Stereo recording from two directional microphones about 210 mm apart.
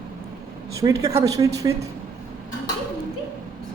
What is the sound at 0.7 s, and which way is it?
A woman's voice, 15° right (ahead or behind).